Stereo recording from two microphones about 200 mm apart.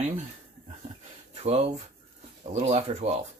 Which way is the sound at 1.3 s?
35° right (ahead or behind).